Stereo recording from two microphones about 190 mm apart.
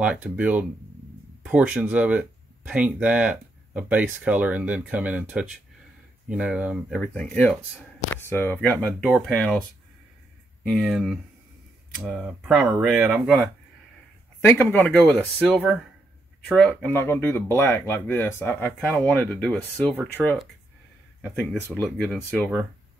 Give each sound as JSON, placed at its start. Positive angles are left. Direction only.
{"t": 0.0, "sound": "speech", "side_deg": -5}
{"t": 7.0, "sound": "speech", "side_deg": 5}
{"t": 10.7, "sound": "speech", "side_deg": 0}
{"t": 14.4, "sound": "speech", "side_deg": 10}
{"t": 21.7, "sound": "speech", "side_deg": 5}